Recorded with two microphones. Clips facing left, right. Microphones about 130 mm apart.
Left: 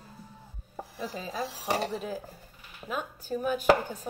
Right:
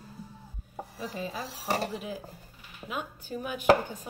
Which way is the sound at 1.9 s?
40° left (ahead or behind).